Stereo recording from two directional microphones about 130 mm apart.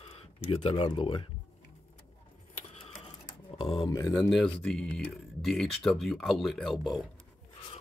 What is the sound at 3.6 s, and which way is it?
Speech, 45° left (ahead or behind).